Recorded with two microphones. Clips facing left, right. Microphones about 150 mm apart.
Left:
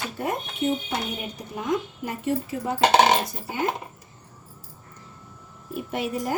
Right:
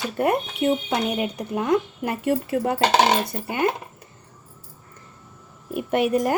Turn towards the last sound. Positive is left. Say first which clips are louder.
# right 8 dB
turn(degrees=-70)  # may be behind; listen again after turning